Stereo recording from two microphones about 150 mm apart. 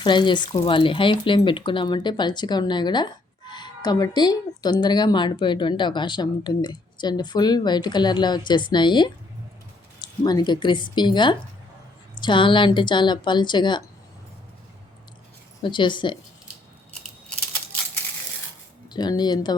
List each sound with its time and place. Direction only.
0.0 s speech: 30° left (ahead or behind)
15.6 s speech: 30° left (ahead or behind)
18.9 s speech: 30° left (ahead or behind)